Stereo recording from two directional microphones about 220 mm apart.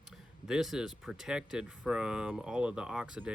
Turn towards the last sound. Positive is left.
turn(degrees=-5)  # may be behind; listen again after turning